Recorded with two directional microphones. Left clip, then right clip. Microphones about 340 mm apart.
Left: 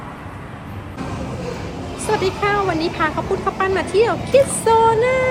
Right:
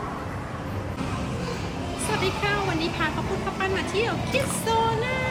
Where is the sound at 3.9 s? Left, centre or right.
Centre.